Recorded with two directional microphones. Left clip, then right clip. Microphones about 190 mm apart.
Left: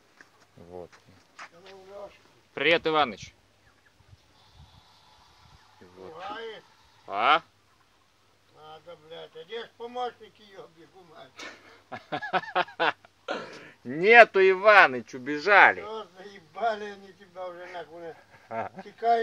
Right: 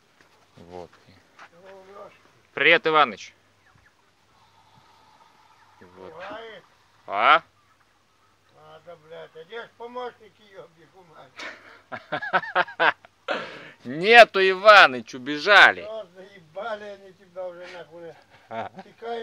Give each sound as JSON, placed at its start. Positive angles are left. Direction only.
{"t": 2.5, "sound": "speech", "side_deg": -5}
{"t": 7.1, "sound": "speech", "side_deg": -5}
{"t": 8.8, "sound": "speech", "side_deg": 55}
{"t": 11.3, "sound": "a sound", "side_deg": -5}
{"t": 13.6, "sound": "speech", "side_deg": -15}
{"t": 16.5, "sound": "a man's voice", "side_deg": 45}
{"t": 18.3, "sound": "speech", "side_deg": -10}